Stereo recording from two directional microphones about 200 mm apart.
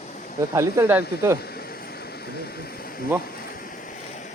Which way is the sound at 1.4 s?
50° left (ahead or behind).